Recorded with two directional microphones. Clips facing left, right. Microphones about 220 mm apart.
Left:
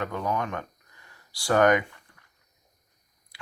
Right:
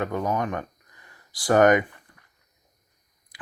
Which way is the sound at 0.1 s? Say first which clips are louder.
Right 3 dB; 45° right (ahead or behind).